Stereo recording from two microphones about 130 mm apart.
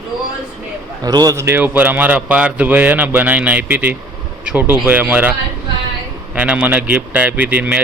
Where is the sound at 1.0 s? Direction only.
30° right (ahead or behind); by 5.3 s 15° right (ahead or behind).